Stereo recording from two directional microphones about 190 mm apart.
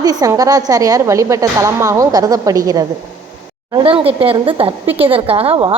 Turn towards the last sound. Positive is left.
turn(degrees=-30)  # may be behind; listen again after turning